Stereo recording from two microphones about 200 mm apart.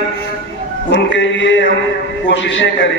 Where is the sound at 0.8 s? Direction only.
65° left (ahead or behind).